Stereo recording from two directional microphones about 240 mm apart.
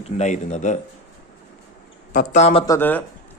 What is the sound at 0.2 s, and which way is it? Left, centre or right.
Speech, left.